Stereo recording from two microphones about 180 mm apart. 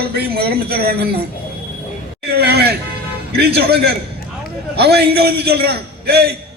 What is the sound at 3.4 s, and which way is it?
A man's voice, 65° right (ahead or behind).